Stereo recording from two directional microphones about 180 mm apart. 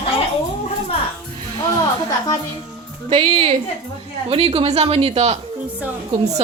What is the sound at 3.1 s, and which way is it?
A woman's voice, 30° right (ahead or behind).